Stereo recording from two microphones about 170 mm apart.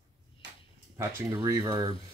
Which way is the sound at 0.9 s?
15° right (ahead or behind).